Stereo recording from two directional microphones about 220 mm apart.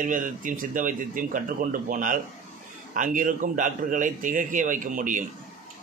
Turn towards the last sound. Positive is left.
turn(degrees=-35)  # may be behind; listen again after turning